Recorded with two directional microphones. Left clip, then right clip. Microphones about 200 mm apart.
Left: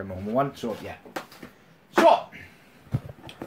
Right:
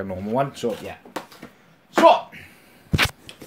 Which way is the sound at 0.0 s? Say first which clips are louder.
Right 2 dB; 40° right (ahead or behind).